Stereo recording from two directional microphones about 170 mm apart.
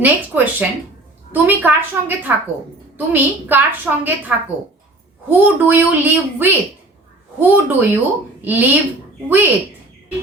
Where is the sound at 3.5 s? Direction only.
10° right (ahead or behind).